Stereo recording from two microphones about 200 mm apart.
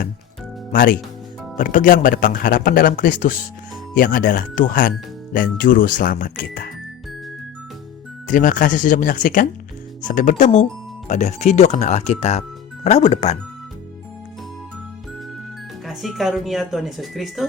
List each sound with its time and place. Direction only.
0.7 s speech: 45° left (ahead or behind)
8.3 s speech: 40° left (ahead or behind)
15.9 s speech: centre (ahead or behind)